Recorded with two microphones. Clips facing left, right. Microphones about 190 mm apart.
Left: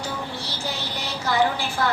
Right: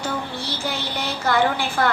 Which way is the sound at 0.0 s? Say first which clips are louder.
Right 3 dB; 55° right (ahead or behind).